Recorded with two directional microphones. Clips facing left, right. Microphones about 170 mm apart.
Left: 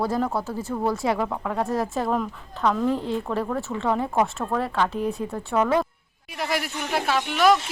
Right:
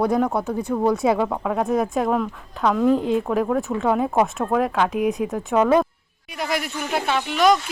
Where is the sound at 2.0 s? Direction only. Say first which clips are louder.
Right 3 dB; centre (ahead or behind).